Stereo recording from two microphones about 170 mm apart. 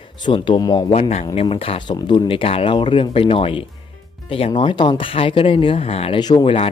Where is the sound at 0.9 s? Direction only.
40° left (ahead or behind).